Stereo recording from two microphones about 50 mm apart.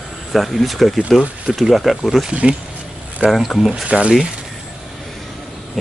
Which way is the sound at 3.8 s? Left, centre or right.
Right.